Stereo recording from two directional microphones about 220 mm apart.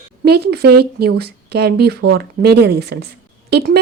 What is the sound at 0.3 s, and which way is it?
Speech, 45° right (ahead or behind).